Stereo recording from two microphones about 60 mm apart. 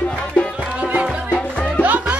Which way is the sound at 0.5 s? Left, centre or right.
Centre.